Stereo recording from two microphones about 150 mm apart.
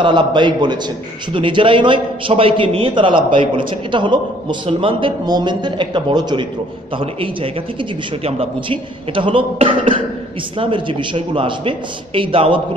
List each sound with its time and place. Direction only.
0.0 s a man's voice: 30° right (ahead or behind)
8.3 s a man's voice: 35° right (ahead or behind)